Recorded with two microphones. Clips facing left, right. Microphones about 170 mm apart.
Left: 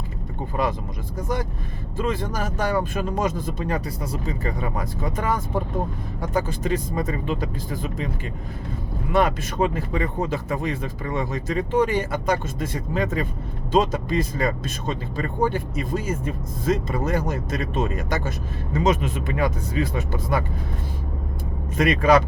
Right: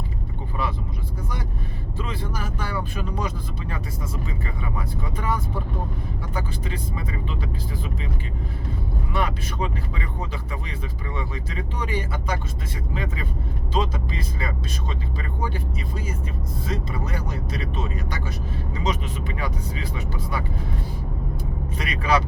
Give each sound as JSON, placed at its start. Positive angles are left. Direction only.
{"t": 2.0, "sound": "speech", "side_deg": 45}
{"t": 9.1, "sound": "speech", "side_deg": 45}
{"t": 16.6, "sound": "speech", "side_deg": 50}
{"t": 21.8, "sound": "speech", "side_deg": 45}